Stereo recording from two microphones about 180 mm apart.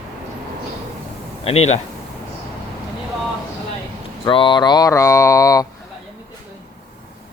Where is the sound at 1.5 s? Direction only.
35° left (ahead or behind).